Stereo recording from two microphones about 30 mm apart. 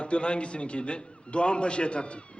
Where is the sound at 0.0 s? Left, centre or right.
Left.